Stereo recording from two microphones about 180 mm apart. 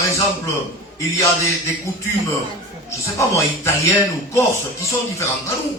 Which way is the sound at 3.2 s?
15° left (ahead or behind).